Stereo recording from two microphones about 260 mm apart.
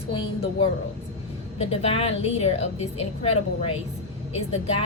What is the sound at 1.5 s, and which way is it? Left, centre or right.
A woman's voice, left.